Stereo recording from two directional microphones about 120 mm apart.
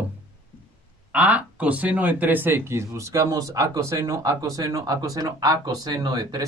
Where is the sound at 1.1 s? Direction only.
10° right (ahead or behind).